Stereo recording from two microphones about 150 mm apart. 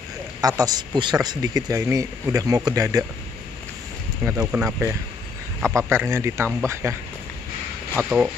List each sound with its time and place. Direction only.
0.4 s speech: 25° right (ahead or behind)
4.2 s speech: 10° right (ahead or behind)
8.0 s speech: 10° right (ahead or behind)